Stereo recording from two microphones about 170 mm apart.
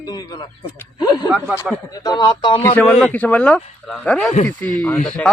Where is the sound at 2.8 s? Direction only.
5° left (ahead or behind).